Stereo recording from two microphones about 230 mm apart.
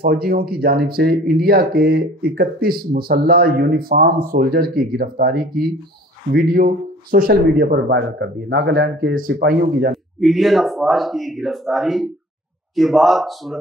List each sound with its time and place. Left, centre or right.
0.0 s speech: right
10.2 s speech: centre